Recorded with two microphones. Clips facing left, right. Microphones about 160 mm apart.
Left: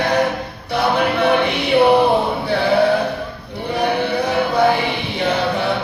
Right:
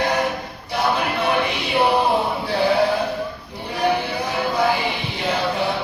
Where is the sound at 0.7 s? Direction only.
60° left (ahead or behind).